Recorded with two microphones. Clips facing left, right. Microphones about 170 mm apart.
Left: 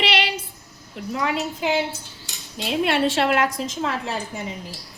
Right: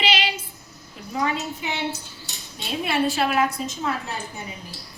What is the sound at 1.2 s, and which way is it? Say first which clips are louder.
Speech: left 2 dB; 85° left.